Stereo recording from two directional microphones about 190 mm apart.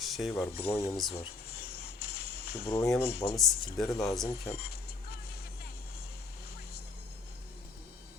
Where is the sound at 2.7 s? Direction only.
15° left (ahead or behind).